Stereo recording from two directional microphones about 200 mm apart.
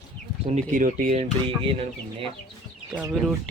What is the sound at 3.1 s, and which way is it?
Speech, centre (ahead or behind).